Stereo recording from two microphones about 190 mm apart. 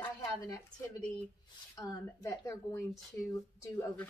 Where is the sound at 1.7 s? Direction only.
15° left (ahead or behind).